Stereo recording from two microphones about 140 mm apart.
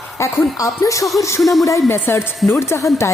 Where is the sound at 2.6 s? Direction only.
20° left (ahead or behind).